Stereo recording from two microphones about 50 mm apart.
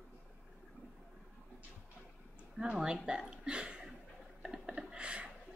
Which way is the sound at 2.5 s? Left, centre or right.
Centre.